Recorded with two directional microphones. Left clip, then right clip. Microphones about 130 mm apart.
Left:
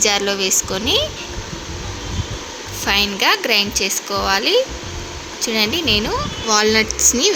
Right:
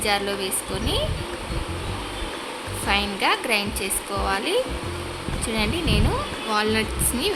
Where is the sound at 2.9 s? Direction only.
30° left (ahead or behind).